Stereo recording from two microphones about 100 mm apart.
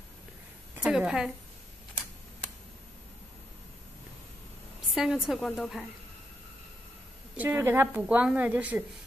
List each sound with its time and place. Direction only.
0.8 s a woman's voice: 10° right (ahead or behind)
4.9 s a woman's voice: 5° right (ahead or behind)
7.3 s a woman's voice: 20° right (ahead or behind)